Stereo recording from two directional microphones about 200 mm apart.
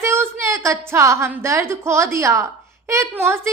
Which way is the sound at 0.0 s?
15° right (ahead or behind).